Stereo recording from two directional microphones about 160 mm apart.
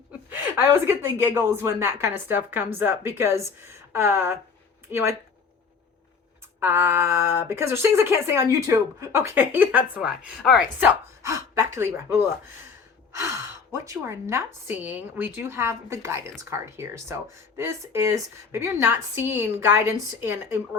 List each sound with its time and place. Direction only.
0.3 s speech: 15° right (ahead or behind)
6.6 s speech: 15° right (ahead or behind)
10.8 s speech: 20° right (ahead or behind)